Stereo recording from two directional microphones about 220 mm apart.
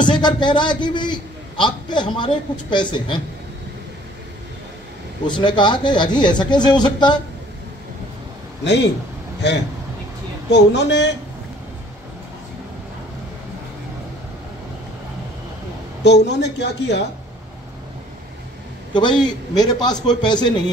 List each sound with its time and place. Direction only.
0.2 s a man's voice: 20° left (ahead or behind)
5.2 s a man's voice: 20° left (ahead or behind)
10.5 s a woman's voice: 50° left (ahead or behind)
16.0 s a woman's voice: 50° left (ahead or behind)
18.9 s a man's voice: 20° left (ahead or behind)